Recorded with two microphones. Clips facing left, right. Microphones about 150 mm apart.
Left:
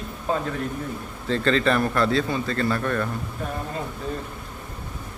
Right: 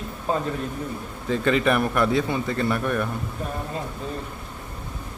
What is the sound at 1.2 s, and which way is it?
A man's voice, 10° right (ahead or behind).